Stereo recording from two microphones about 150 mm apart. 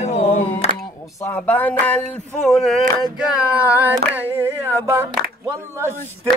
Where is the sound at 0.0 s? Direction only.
45° left (ahead or behind).